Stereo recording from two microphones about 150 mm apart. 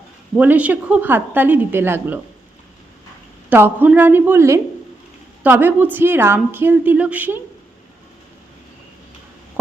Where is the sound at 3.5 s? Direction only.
10° right (ahead or behind).